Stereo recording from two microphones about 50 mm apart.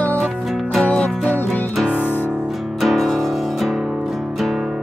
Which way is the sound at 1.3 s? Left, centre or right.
Left.